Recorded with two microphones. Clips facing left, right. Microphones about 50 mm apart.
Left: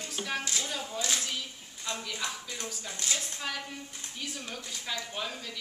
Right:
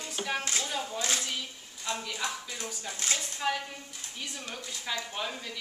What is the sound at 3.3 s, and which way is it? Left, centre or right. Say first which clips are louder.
A woman's voice: right 5 dB; centre.